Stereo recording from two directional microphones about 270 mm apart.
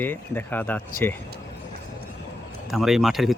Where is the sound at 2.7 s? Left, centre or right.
Centre.